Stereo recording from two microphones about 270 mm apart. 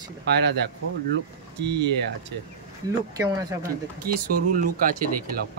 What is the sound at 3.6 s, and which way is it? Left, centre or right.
Speech, right.